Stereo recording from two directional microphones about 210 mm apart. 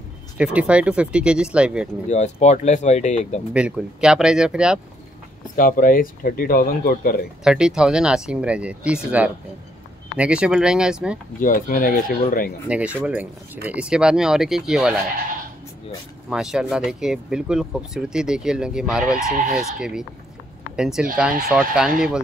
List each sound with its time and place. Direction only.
0.4 s speech: 5° right (ahead or behind)
2.0 s speech: 35° left (ahead or behind)
3.5 s speech: 5° right (ahead or behind)
5.6 s speech: 40° left (ahead or behind)
7.4 s speech: 5° right (ahead or behind)
11.3 s speech: 40° left (ahead or behind)
12.6 s speech: 5° right (ahead or behind)
16.3 s speech: 5° right (ahead or behind)